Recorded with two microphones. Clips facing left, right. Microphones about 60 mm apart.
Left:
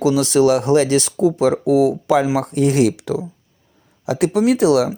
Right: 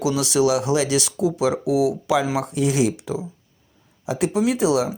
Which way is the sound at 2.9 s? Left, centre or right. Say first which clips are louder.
Left 5 dB; left.